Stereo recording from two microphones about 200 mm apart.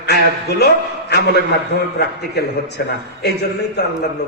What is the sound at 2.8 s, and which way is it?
A man's voice, 55° left (ahead or behind).